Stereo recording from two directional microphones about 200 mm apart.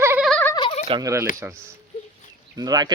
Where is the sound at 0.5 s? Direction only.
25° left (ahead or behind).